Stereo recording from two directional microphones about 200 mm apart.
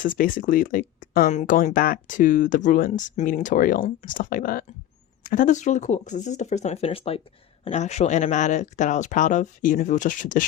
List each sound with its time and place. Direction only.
0.2 s speech: 45° left (ahead or behind)